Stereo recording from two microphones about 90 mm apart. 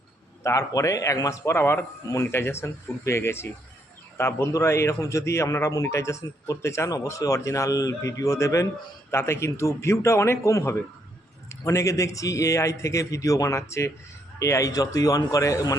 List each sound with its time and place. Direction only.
0.4 s a man's voice: 40° left (ahead or behind)